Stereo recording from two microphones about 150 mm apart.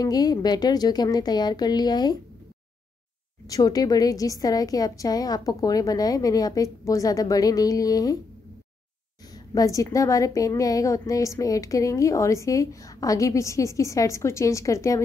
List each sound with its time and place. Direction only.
0.0 s a woman's voice: 25° left (ahead or behind)
3.4 s a woman's voice: 25° left (ahead or behind)
9.3 s a woman's voice: 25° left (ahead or behind)